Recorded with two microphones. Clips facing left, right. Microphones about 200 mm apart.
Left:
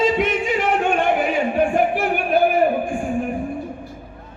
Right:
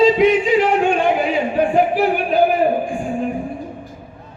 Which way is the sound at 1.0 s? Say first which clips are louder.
Right 2 dB; 50° left (ahead or behind).